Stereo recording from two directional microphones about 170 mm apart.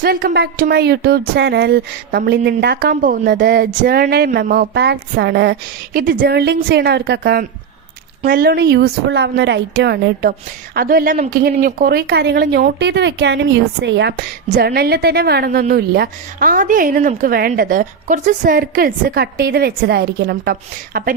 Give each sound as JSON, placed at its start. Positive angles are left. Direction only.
{"t": 0.0, "sound": "a woman's voice", "side_deg": -60}
{"t": 10.8, "sound": "a woman's voice", "side_deg": -55}